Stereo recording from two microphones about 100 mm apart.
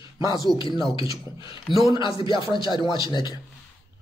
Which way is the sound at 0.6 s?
55° left (ahead or behind).